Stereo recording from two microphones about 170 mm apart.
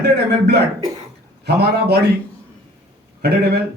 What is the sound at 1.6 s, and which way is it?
Speech, 75° right (ahead or behind).